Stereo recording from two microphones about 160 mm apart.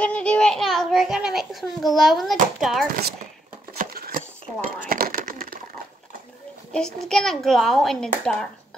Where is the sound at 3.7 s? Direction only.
65° right (ahead or behind).